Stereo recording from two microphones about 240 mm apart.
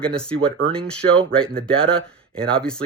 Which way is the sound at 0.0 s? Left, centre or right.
Centre.